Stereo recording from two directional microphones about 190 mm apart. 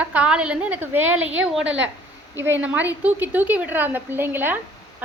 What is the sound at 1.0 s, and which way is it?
Speech, 90° right.